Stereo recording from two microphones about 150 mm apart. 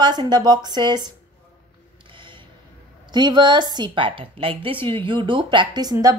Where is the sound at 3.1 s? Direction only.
30° right (ahead or behind).